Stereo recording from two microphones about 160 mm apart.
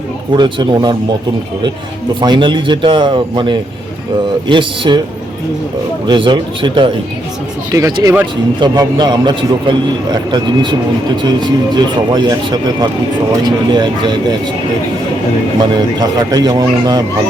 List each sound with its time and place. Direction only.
0.3 s a man's voice: 25° right (ahead or behind)
2.2 s a man's voice: 30° right (ahead or behind)
6.1 s a man's voice: 30° right (ahead or behind)
15.7 s a man's voice: 25° right (ahead or behind)